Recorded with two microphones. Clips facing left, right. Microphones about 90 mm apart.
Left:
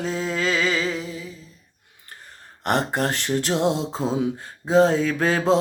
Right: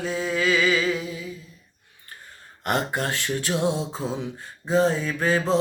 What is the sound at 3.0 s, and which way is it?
Music, 35° left (ahead or behind).